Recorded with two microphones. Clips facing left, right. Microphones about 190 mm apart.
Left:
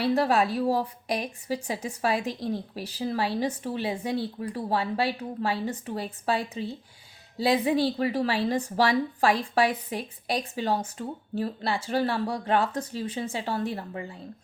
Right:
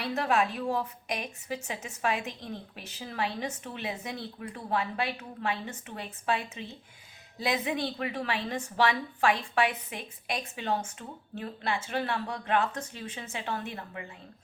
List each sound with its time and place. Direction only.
0.0 s a woman's voice: 35° left (ahead or behind)